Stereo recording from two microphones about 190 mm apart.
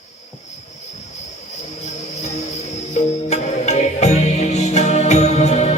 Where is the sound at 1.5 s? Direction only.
35° left (ahead or behind).